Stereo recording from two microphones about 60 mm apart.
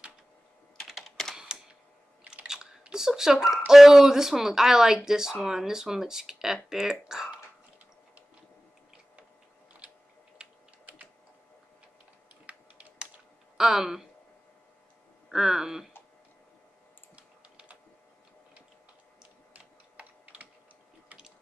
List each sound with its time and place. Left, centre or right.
0.7 s computer keyboard: centre
1.3 s camera: centre
2.2 s speech: centre
12.4 s typing: centre
13.6 s speech: centre
15.3 s speech: centre
17.1 s computer keyboard: right